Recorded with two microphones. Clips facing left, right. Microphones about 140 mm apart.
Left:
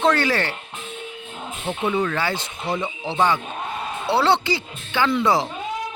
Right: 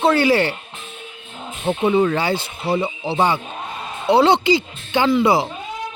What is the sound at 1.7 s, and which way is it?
Speech, 15° right (ahead or behind).